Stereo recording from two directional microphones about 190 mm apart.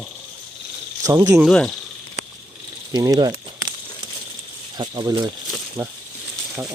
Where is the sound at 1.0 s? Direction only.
15° right (ahead or behind).